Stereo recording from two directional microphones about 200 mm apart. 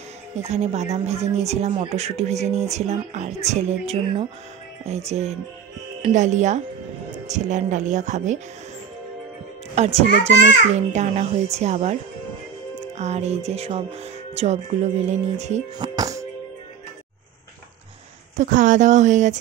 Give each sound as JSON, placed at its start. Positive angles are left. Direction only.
{"t": 0.4, "sound": "speech", "side_deg": -35}
{"t": 9.8, "sound": "speech", "side_deg": -30}
{"t": 15.8, "sound": "music", "side_deg": -20}
{"t": 18.4, "sound": "speech", "side_deg": -40}